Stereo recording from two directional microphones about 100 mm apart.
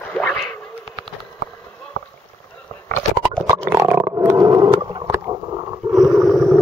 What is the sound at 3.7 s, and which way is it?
Roaring cats, 25° right (ahead or behind).